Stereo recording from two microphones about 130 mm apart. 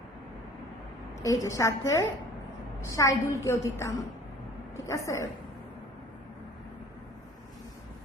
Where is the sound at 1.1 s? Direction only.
25° left (ahead or behind).